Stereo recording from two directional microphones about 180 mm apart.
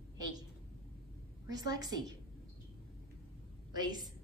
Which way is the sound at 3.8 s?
20° right (ahead or behind).